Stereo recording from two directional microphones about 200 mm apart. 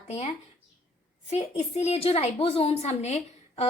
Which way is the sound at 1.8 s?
30° left (ahead or behind).